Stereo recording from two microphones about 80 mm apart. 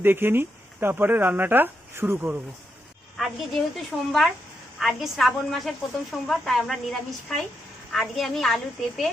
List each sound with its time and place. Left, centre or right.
0.0 s speech: right
3.2 s a woman's voice: centre
3.9 s speech: centre
4.8 s a woman's voice: centre